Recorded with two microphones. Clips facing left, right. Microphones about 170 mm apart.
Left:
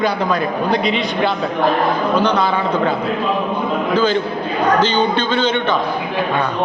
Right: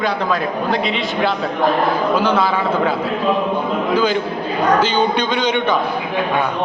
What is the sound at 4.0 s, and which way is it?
A man's voice, 10° right (ahead or behind).